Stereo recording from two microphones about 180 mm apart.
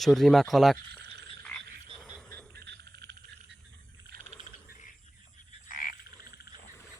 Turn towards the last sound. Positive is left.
turn(degrees=50)  # may be behind; listen again after turning